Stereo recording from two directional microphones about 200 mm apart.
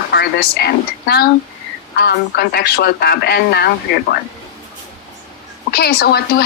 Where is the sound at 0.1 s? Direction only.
55° left (ahead or behind).